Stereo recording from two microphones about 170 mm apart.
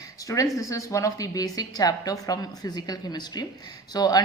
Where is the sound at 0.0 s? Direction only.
20° left (ahead or behind).